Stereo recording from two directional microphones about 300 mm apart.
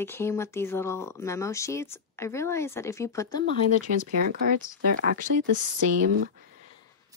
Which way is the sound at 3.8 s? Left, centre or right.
Right.